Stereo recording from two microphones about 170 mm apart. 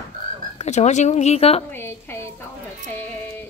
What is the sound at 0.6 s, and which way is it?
Speech, 45° left (ahead or behind).